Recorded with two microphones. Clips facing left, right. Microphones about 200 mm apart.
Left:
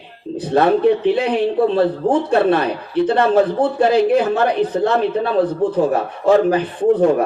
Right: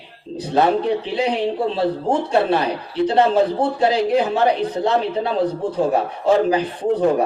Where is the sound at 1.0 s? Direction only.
55° left (ahead or behind).